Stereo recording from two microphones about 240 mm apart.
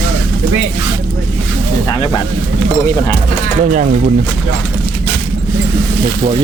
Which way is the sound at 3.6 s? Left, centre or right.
Right.